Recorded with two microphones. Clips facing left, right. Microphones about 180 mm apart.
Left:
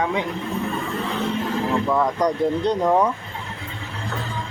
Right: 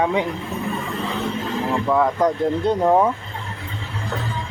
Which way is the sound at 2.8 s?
20° right (ahead or behind).